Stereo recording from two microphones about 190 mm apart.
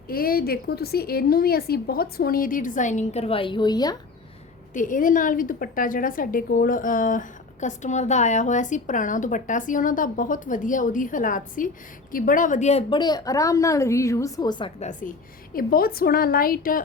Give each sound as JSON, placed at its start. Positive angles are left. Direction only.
{"t": 0.1, "sound": "a woman's voice", "side_deg": 50}
{"t": 4.7, "sound": "a woman's voice", "side_deg": 45}
{"t": 14.8, "sound": "a woman's voice", "side_deg": 40}
{"t": 15.5, "sound": "a woman's voice", "side_deg": 50}